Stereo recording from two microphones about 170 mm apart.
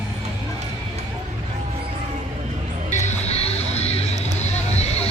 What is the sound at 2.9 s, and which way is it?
Music, 40° left (ahead or behind).